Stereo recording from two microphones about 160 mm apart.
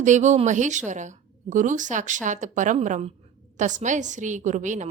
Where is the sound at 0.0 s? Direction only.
50° right (ahead or behind).